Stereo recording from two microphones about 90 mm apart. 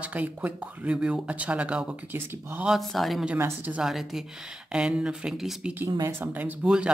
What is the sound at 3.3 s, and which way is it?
Speech, 25° right (ahead or behind).